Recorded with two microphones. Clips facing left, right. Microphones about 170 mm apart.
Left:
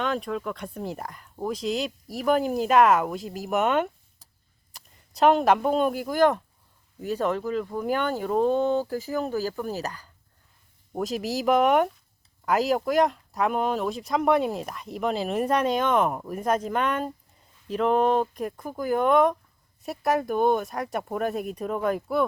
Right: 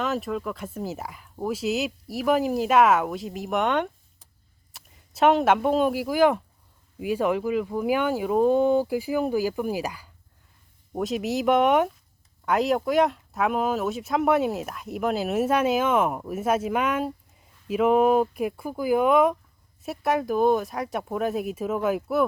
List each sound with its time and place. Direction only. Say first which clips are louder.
0.0 s speech: right 1 dB; 5° right (ahead or behind)